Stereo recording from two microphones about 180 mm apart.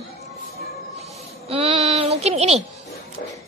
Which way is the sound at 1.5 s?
35° right (ahead or behind).